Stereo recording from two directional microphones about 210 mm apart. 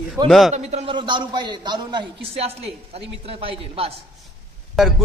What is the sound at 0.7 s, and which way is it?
A man's voice, 25° right (ahead or behind).